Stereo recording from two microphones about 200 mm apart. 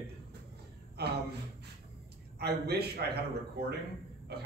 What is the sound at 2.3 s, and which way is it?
Speech, 55° right (ahead or behind).